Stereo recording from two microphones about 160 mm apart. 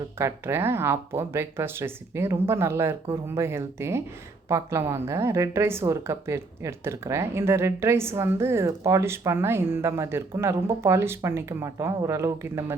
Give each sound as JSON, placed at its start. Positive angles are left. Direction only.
{"t": 0.2, "sound": "a woman's voice", "side_deg": -15}